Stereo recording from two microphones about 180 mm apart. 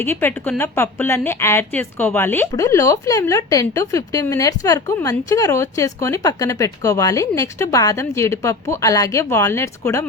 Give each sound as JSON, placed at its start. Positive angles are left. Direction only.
{"t": 0.0, "sound": "a woman's voice", "side_deg": 10}